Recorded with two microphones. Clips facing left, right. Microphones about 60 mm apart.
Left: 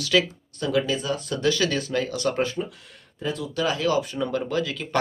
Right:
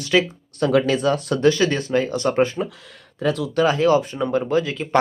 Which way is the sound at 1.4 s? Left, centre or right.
Right.